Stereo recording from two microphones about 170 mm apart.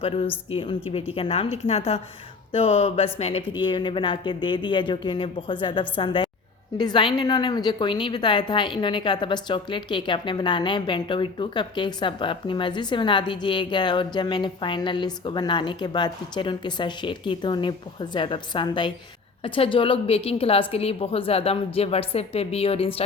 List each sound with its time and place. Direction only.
0.5 s a woman's voice: 30° left (ahead or behind)